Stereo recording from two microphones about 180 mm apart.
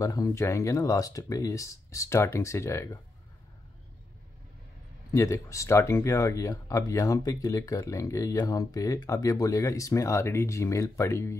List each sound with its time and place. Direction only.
0.0 s speech: 20° left (ahead or behind)
5.1 s speech: 15° left (ahead or behind)